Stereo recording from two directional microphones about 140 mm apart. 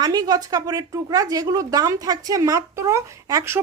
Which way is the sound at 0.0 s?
30° right (ahead or behind).